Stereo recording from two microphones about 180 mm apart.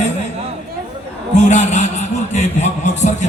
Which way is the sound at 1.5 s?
40° left (ahead or behind).